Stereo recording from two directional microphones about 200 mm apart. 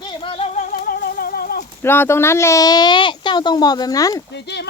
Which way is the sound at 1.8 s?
10° left (ahead or behind).